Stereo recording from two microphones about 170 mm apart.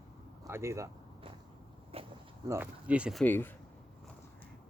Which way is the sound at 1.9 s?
35° right (ahead or behind).